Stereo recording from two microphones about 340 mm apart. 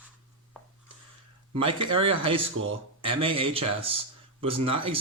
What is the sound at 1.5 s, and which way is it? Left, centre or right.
Speech, centre.